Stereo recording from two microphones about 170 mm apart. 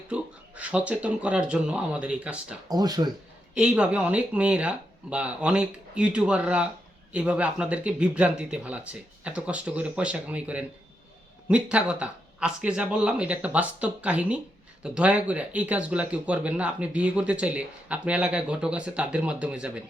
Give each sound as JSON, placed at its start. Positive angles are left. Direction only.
{"t": 0.1, "sound": "speech", "side_deg": -5}
{"t": 2.6, "sound": "speech", "side_deg": -20}
{"t": 3.5, "sound": "speech", "side_deg": -5}